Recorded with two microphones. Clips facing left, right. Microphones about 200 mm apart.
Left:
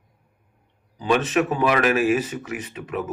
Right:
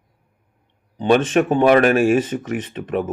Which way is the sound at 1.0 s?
30° right (ahead or behind).